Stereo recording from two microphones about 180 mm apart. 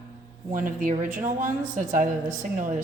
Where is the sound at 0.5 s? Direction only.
50° right (ahead or behind).